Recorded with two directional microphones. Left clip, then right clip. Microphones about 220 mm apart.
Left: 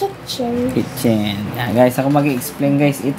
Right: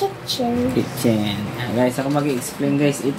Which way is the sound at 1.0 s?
55° left (ahead or behind).